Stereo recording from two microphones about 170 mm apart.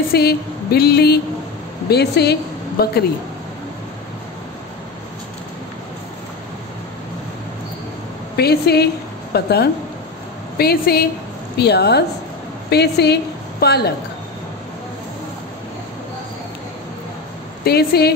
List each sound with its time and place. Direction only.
0.1 s a woman's voice: 65° left (ahead or behind)
8.4 s a woman's voice: 70° left (ahead or behind)
17.6 s a woman's voice: 70° left (ahead or behind)